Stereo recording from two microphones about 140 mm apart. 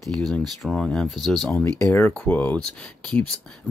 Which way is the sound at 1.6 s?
15° left (ahead or behind).